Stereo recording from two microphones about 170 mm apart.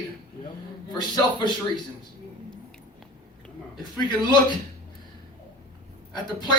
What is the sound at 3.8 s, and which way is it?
Speech, 25° left (ahead or behind).